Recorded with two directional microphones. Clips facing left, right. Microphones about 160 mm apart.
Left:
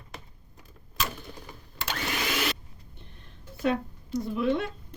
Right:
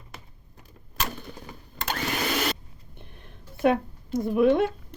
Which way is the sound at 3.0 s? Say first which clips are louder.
Right 5 dB; 55° right (ahead or behind).